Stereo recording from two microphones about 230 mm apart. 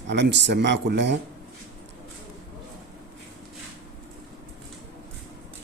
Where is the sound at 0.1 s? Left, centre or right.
Right.